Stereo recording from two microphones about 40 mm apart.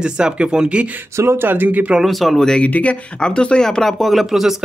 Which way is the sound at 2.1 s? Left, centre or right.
Centre.